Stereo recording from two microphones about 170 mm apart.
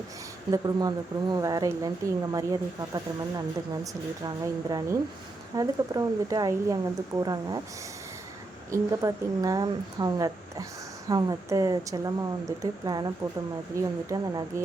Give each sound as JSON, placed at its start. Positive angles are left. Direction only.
{"t": 0.5, "sound": "speech", "side_deg": -25}
{"t": 8.7, "sound": "speech", "side_deg": -20}
{"t": 14.1, "sound": "speech", "side_deg": -20}